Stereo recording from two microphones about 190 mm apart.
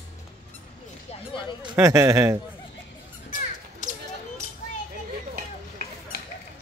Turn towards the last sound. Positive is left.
turn(degrees=-50)  # may be behind; listen again after turning